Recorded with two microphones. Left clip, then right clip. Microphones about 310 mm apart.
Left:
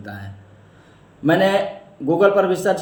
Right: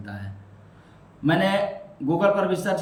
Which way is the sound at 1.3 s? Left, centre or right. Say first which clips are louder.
Left 5 dB; centre.